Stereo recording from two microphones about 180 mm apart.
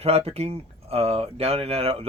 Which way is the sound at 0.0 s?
35° right (ahead or behind).